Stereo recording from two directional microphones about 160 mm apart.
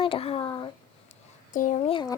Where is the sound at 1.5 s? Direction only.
50° left (ahead or behind).